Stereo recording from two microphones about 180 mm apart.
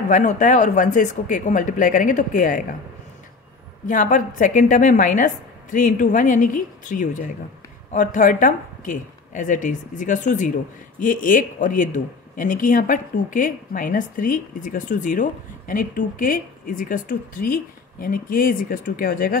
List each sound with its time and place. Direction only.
0.1 s speech: 45° left (ahead or behind)
3.8 s speech: 45° left (ahead or behind)